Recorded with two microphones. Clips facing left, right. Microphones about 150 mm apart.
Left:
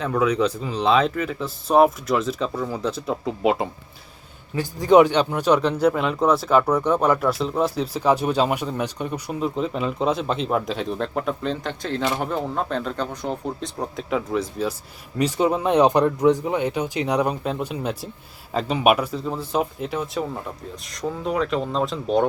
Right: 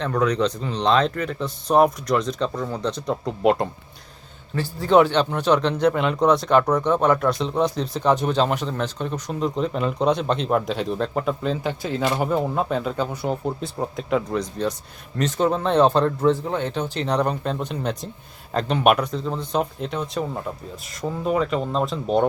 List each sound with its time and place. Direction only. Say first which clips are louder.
0.0 s speech: left 1 dB; 5° left (ahead or behind)
4.5 s speech: left 2 dB; 15° left (ahead or behind)